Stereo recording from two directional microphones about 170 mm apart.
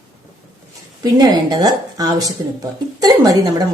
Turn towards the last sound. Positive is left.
turn(degrees=-20)  # may be behind; listen again after turning